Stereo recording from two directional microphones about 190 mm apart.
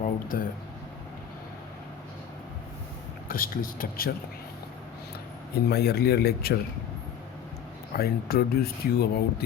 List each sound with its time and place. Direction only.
0.0 s a sound: 45° left (ahead or behind)
3.2 s speech: 50° left (ahead or behind)
5.6 s speech: 55° left (ahead or behind)
7.9 s speech: 55° left (ahead or behind)